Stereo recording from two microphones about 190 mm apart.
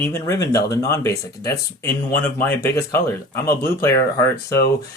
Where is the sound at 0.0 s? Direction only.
15° left (ahead or behind).